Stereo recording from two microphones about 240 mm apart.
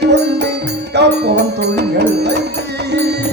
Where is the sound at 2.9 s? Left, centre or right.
Right.